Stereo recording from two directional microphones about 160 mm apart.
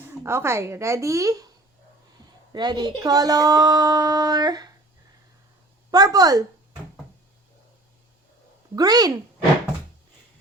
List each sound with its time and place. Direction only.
0.0 s speech: 15° right (ahead or behind)
2.5 s a woman's voice: 25° right (ahead or behind)
5.9 s speech: 25° right (ahead or behind)
8.7 s speech: 25° right (ahead or behind)